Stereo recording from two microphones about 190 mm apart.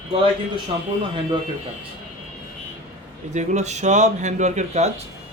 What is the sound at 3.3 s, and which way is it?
A man's voice, 35° right (ahead or behind).